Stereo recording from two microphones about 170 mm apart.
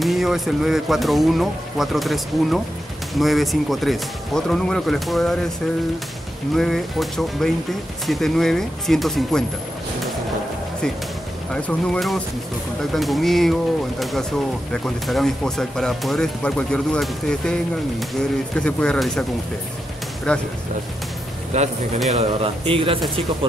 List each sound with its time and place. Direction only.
0.0 s speech: centre (ahead or behind)
6.5 s speech: centre (ahead or behind)
11.5 s speech: 5° left (ahead or behind)
20.3 s speech: 5° left (ahead or behind)
21.5 s speech: 40° right (ahead or behind)